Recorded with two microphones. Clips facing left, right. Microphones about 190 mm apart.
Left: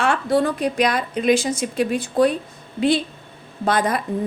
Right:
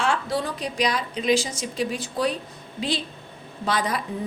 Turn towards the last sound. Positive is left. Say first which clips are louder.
# left 5 dB
turn(degrees=50)  # may be behind; listen again after turning